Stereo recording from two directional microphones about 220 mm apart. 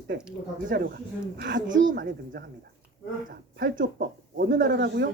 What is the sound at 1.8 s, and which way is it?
Speech, 40° right (ahead or behind).